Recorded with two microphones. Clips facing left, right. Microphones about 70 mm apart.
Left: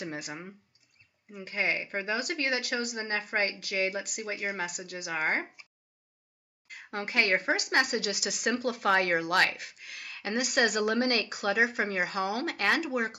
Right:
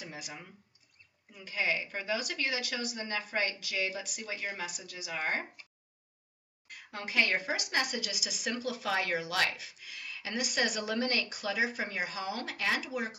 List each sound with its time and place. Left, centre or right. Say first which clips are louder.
0.0 s speech: left 7 dB; left
6.7 s speech: left 4 dB; left